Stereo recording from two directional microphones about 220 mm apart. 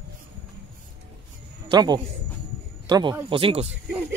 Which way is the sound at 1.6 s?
20° right (ahead or behind).